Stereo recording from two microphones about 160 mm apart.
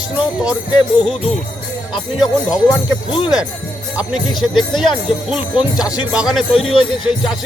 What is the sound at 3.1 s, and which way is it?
Speech, 35° left (ahead or behind).